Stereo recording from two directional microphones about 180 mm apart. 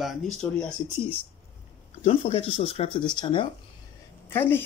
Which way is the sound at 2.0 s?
30° left (ahead or behind).